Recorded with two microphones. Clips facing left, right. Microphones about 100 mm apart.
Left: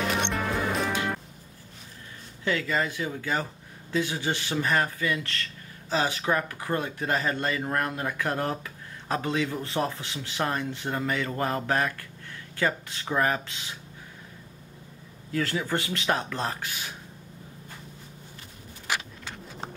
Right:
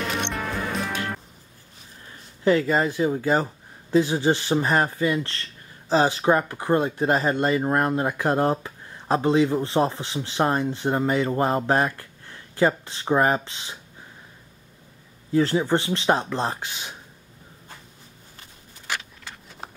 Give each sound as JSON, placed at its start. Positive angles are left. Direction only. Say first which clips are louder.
{"t": 0.0, "sound": "music", "louder": "even", "side_deg": 0}
{"t": 2.4, "sound": "speech", "louder": "right 7 dB", "side_deg": -35}
{"t": 15.3, "sound": "speech", "louder": "right 7 dB", "side_deg": -30}